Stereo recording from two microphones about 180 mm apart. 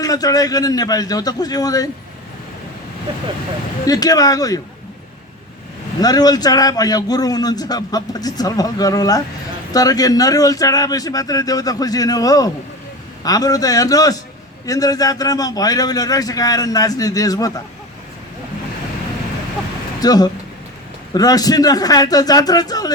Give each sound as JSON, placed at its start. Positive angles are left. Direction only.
{"t": 0.0, "sound": "a man's voice", "side_deg": 20}
{"t": 3.8, "sound": "a man's voice", "side_deg": 20}
{"t": 6.0, "sound": "a man's voice", "side_deg": 20}
{"t": 20.0, "sound": "a man's voice", "side_deg": 20}